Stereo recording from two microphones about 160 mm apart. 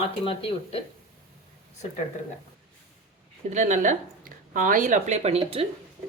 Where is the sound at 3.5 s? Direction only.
50° right (ahead or behind).